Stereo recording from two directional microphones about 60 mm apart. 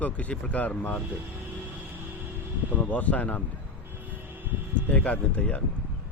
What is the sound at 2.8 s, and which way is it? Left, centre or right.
Speech, left.